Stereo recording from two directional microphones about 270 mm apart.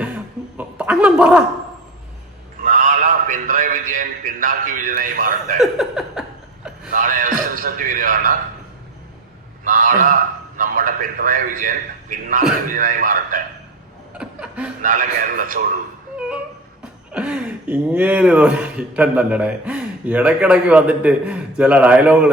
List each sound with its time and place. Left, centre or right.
0.5 s a sound: centre
2.6 s a man's voice: right
5.5 s speech: centre
6.9 s a man's voice: right
9.6 s a man's voice: right
14.1 s chuckle: centre
14.8 s a man's voice: right
17.1 s speech: centre